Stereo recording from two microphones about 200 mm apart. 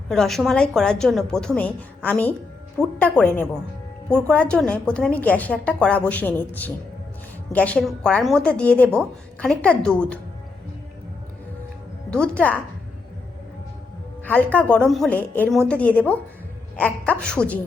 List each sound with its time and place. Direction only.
0.1 s a woman's voice: centre (ahead or behind)
12.1 s a woman's voice: 5° left (ahead or behind)
14.5 s a woman's voice: 5° left (ahead or behind)